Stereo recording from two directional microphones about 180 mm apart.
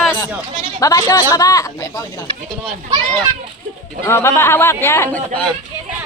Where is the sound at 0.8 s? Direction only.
20° left (ahead or behind).